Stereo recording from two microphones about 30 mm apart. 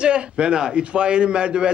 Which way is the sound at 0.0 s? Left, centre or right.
Right.